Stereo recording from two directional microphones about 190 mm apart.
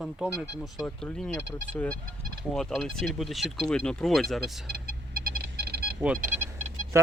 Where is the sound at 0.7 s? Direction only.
5° left (ahead or behind).